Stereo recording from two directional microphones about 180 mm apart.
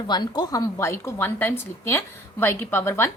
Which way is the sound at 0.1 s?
25° left (ahead or behind).